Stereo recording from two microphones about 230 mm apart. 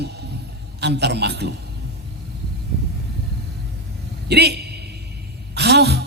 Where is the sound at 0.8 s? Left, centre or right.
Right.